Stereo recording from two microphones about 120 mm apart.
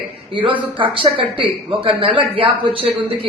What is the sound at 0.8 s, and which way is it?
A man's voice, 45° right (ahead or behind).